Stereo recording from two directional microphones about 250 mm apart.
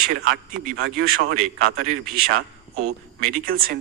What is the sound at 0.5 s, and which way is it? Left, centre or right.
A man's voice, right.